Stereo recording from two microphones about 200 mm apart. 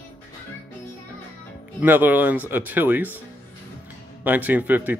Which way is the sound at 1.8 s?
10° right (ahead or behind).